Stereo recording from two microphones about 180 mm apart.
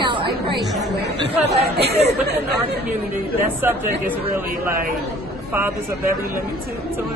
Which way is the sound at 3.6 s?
10° right (ahead or behind).